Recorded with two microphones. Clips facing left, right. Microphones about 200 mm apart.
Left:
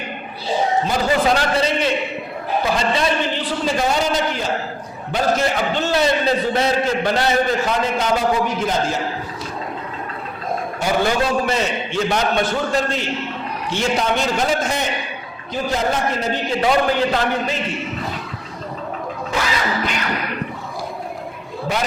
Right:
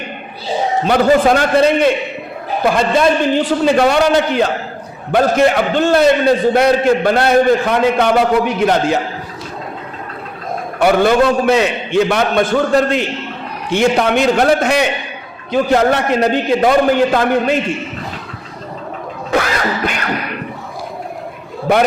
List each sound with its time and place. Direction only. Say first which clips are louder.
0.9 s a man's voice: right 7 dB; 55° right (ahead or behind)
10.8 s a man's voice: right 9 dB; 60° right (ahead or behind)
17.2 s a man's voice: right 7 dB; 55° right (ahead or behind)
19.3 s quack: right 6 dB; 55° right (ahead or behind)
21.7 s a man's voice: right 10 dB; 55° right (ahead or behind)